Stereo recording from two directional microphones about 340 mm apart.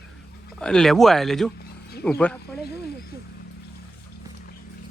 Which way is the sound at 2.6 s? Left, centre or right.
Left.